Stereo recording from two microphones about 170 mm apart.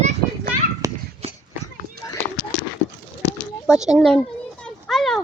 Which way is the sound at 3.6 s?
5° right (ahead or behind).